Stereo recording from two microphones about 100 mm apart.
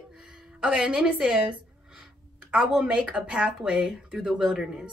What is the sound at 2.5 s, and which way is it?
Speech, 10° right (ahead or behind).